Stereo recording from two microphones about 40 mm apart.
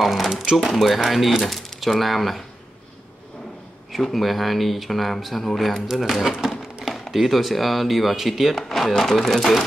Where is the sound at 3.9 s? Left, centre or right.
Centre.